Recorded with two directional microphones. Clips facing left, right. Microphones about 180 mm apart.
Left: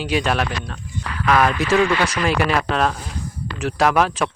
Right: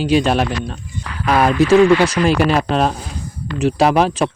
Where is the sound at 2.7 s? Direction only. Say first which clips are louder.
Right 3 dB; 30° right (ahead or behind).